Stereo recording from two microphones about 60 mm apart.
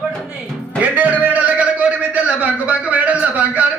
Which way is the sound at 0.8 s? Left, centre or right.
Right.